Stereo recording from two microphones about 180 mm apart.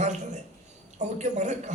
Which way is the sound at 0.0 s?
40° right (ahead or behind).